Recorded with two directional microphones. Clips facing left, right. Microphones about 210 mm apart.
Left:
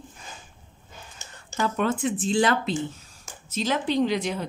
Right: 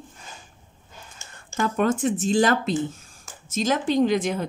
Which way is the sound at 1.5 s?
45° right (ahead or behind).